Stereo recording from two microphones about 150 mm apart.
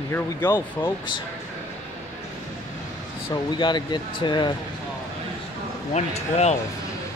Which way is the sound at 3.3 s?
30° left (ahead or behind).